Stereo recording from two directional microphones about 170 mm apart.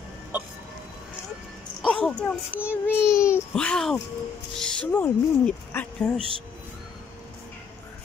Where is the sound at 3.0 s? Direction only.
15° left (ahead or behind).